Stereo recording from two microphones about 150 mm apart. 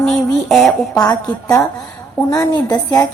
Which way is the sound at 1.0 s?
25° left (ahead or behind).